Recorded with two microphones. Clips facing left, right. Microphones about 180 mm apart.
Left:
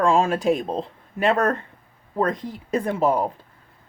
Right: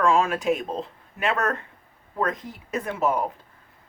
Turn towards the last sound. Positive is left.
turn(degrees=30)  # may be behind; listen again after turning